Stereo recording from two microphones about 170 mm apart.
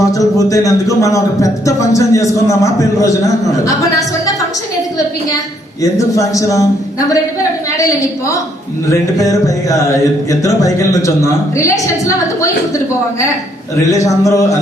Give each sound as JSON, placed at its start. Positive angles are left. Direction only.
{"t": 0.0, "sound": "a man's voice", "side_deg": 20}
{"t": 5.8, "sound": "a man's voice", "side_deg": 20}
{"t": 7.8, "sound": "a man's voice", "side_deg": 20}
{"t": 14.0, "sound": "a man's voice", "side_deg": 20}